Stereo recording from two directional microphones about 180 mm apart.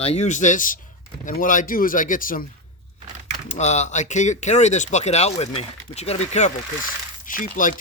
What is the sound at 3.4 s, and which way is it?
Speech, 40° left (ahead or behind).